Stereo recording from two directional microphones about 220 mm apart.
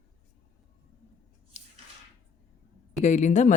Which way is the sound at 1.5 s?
30° left (ahead or behind).